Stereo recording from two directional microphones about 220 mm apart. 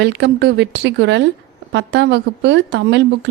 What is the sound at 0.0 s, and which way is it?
Speech, 50° right (ahead or behind).